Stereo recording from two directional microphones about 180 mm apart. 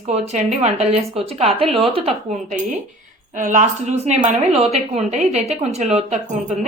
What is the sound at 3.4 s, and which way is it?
A woman's voice, 45° right (ahead or behind).